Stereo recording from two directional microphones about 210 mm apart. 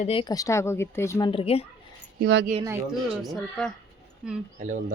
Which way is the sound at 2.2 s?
55° right (ahead or behind).